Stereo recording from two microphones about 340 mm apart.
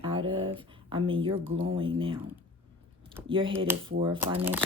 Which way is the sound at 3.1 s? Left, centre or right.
Centre.